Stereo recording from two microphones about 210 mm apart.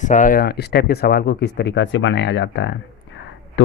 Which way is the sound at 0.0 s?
35° left (ahead or behind).